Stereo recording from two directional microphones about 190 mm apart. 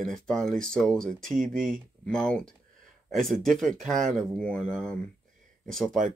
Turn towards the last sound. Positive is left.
turn(degrees=0)  # may be behind; listen again after turning